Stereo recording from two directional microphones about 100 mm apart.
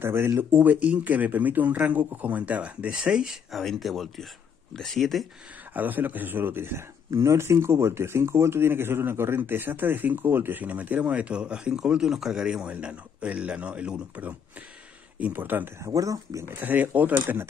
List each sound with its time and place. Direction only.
0.0 s speech: 25° right (ahead or behind); by 5.2 s 5° left (ahead or behind)
5.7 s speech: 15° right (ahead or behind)
15.8 s speech: 35° right (ahead or behind)